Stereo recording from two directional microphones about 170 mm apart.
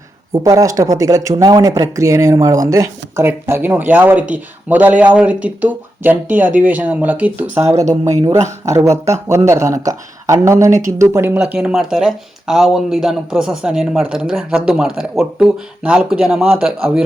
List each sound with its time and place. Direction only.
0.4 s speech: 20° right (ahead or behind)
8.0 s speech: 20° right (ahead or behind); by 17.0 s 5° right (ahead or behind)